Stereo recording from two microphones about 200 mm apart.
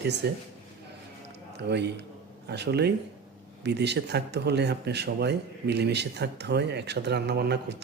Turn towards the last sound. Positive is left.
turn(degrees=-55)  # may be behind; listen again after turning